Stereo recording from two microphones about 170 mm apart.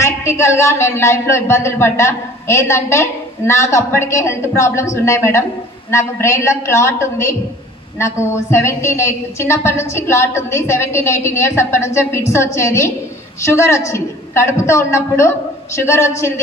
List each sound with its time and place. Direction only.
0.0 s speech: 15° left (ahead or behind)